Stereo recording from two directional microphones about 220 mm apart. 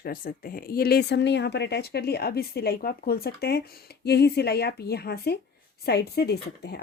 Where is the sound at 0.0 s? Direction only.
40° left (ahead or behind).